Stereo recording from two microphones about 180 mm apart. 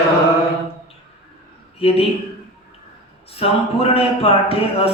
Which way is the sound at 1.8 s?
35° left (ahead or behind).